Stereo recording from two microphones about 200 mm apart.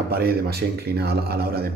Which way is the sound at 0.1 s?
50° right (ahead or behind).